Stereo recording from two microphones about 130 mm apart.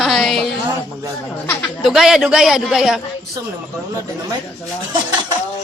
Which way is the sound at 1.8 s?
5° right (ahead or behind).